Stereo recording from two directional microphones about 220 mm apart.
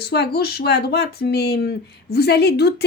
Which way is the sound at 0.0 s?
45° left (ahead or behind).